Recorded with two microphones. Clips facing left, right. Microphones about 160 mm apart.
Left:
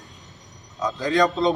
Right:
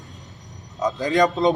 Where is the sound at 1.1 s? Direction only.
15° right (ahead or behind).